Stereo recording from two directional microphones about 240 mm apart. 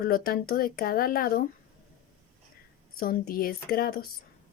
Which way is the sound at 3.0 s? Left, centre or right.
Left.